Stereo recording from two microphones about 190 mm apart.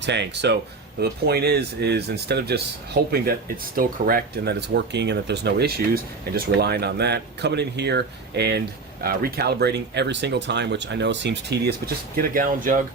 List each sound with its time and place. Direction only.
0.0 s speech: 65° right (ahead or behind); by 12.8 s 45° right (ahead or behind)